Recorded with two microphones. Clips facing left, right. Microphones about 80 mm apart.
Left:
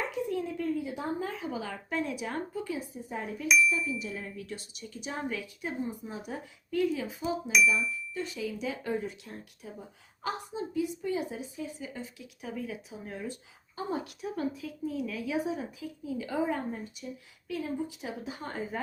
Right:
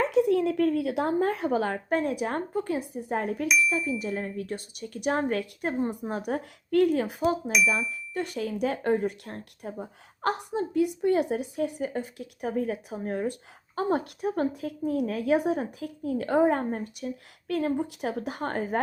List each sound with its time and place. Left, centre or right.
0.0 s speech: right